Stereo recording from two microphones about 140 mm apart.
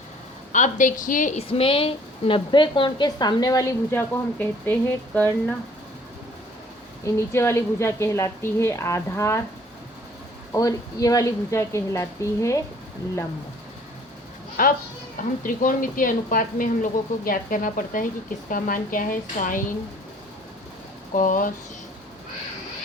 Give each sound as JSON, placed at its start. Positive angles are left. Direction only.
{"t": 0.5, "sound": "a woman's voice", "side_deg": 65}
{"t": 1.5, "sound": "a woman's voice", "side_deg": 40}
{"t": 7.0, "sound": "a woman's voice", "side_deg": 20}
{"t": 10.5, "sound": "a woman's voice", "side_deg": 25}
{"t": 14.6, "sound": "speech", "side_deg": 90}
{"t": 15.4, "sound": "speech", "side_deg": 75}
{"t": 21.2, "sound": "speech", "side_deg": 70}